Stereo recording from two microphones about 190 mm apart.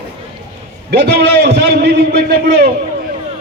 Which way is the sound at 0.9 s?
60° right (ahead or behind).